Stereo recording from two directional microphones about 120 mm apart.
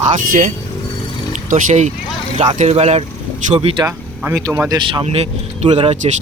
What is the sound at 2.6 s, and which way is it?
Speech, 65° right (ahead or behind).